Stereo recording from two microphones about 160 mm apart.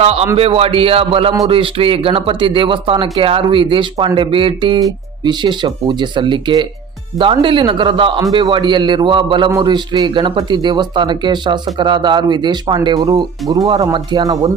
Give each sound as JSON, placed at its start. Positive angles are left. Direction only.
{"t": 0.0, "sound": "speech", "side_deg": -40}